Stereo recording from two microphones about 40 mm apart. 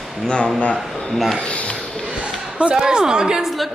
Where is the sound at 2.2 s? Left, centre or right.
Right.